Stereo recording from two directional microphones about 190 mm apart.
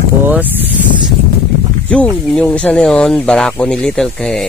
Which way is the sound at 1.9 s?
5° left (ahead or behind).